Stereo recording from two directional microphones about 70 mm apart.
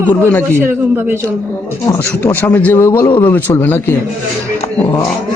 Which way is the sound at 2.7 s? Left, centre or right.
Left.